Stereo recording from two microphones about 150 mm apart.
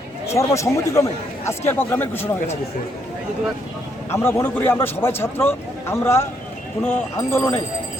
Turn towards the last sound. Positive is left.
turn(degrees=15)  # may be behind; listen again after turning